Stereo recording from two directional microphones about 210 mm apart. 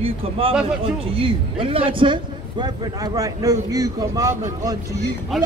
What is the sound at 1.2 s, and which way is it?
A man's voice, 25° right (ahead or behind).